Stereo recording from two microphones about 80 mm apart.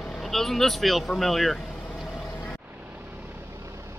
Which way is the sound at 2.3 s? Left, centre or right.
Left.